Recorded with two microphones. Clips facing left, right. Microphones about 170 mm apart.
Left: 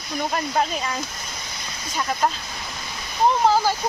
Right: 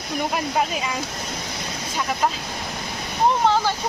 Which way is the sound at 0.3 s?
5° right (ahead or behind).